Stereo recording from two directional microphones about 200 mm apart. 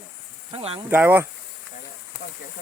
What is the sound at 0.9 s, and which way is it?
Speech, 10° right (ahead or behind).